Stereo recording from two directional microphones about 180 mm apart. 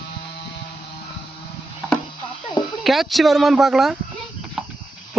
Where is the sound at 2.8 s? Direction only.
Centre (ahead or behind).